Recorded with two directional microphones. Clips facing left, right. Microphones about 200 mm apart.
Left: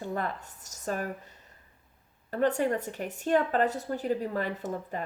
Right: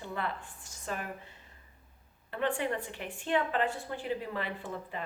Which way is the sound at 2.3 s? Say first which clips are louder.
Left 6 dB; 40° left (ahead or behind).